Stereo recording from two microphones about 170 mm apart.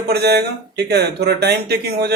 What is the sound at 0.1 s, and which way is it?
A man's voice, 70° right (ahead or behind).